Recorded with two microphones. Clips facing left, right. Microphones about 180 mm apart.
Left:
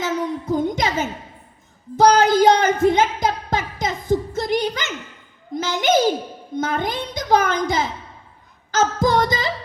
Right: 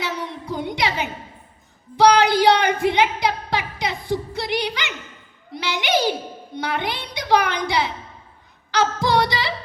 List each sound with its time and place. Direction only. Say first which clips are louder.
0.0 s music: left 5 dB; 45° left (ahead or behind)
5.5 s a sound: left 4 dB; 45° left (ahead or behind)
8.7 s singing: left 1 dB; 45° left (ahead or behind)